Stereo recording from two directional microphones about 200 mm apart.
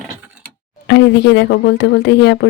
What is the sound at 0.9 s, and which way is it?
Speech, 60° left (ahead or behind).